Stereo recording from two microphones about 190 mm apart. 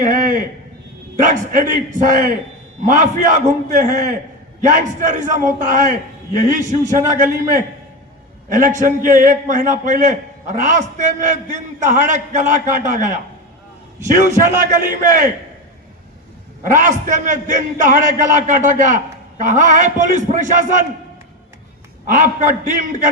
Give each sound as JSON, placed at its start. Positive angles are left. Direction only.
{"t": 0.0, "sound": "a sound", "side_deg": -45}
{"t": 1.1, "sound": "a man's voice", "side_deg": -40}
{"t": 14.8, "sound": "a man's voice", "side_deg": -45}
{"t": 16.7, "sound": "a man's voice", "side_deg": -40}
{"t": 22.1, "sound": "a man's voice", "side_deg": -45}